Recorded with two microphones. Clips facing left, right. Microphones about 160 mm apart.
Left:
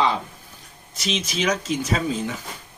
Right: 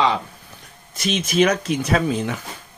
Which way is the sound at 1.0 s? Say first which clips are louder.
Right 8 dB; 55° right (ahead or behind).